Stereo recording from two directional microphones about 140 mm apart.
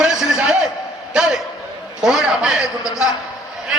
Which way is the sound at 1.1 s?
5° right (ahead or behind).